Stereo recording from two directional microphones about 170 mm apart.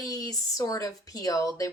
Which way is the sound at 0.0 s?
20° left (ahead or behind).